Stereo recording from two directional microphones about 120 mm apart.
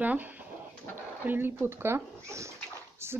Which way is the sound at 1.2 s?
20° right (ahead or behind).